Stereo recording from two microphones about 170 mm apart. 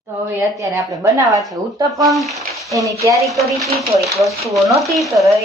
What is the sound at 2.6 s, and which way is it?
Speech, 20° right (ahead or behind).